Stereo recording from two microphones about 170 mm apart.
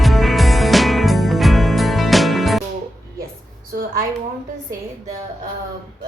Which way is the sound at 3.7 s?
65° right (ahead or behind).